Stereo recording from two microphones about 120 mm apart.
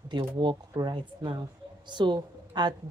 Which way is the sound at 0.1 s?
40° right (ahead or behind).